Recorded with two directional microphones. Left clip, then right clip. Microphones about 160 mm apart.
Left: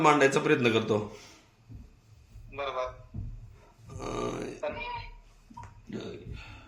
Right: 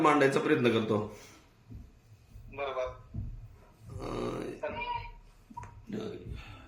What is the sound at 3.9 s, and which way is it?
Grunt, 30° left (ahead or behind).